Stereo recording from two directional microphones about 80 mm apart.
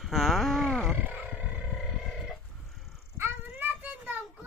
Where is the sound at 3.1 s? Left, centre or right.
Right.